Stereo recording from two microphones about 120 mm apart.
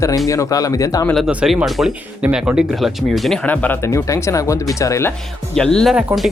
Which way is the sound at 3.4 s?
15° left (ahead or behind).